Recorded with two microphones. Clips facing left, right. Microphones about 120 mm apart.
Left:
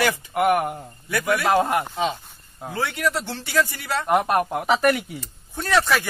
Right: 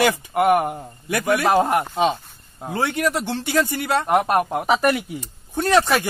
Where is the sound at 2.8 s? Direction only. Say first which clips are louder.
Right 3 dB; 20° right (ahead or behind).